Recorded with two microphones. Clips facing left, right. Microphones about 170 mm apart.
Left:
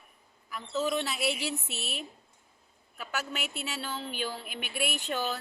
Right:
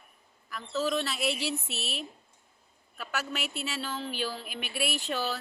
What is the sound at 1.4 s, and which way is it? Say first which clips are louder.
Speech: right 1 dB; 75° right (ahead or behind).